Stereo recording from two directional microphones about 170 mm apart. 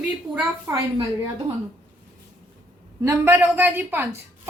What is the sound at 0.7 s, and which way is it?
Speech, 15° right (ahead or behind).